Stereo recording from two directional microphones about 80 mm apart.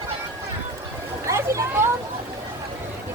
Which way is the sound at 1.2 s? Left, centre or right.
Right.